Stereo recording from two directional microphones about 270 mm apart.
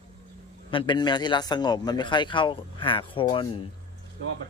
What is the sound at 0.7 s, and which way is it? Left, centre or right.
Speech, centre.